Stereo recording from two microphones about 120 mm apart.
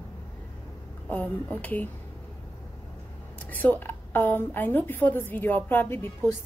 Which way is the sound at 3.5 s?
15° left (ahead or behind).